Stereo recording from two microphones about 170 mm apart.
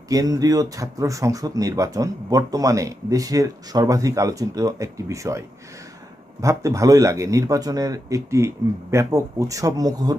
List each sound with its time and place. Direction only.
0.1 s speech: 20° right (ahead or behind)
6.4 s speech: 20° right (ahead or behind)